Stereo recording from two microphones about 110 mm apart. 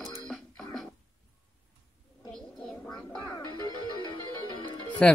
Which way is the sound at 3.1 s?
40° left (ahead or behind).